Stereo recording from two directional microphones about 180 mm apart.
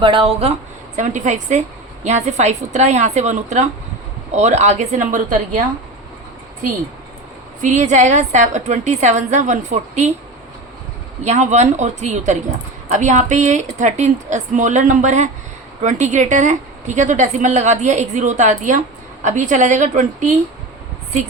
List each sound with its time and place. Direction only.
0.0 s a woman's voice: 30° right (ahead or behind)
0.9 s a woman's voice: 45° right (ahead or behind)
7.6 s a woman's voice: 40° right (ahead or behind)
11.2 s a woman's voice: 40° right (ahead or behind)